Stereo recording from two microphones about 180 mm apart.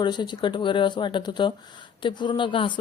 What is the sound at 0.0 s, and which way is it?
A woman's voice, 25° left (ahead or behind).